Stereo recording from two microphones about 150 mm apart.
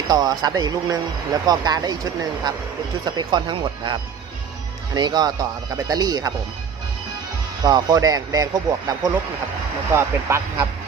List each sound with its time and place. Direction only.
0.1 s speech: 25° right (ahead or behind)
7.6 s speech: 25° right (ahead or behind)